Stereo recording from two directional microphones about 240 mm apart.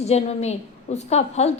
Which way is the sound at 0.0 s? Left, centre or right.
Left.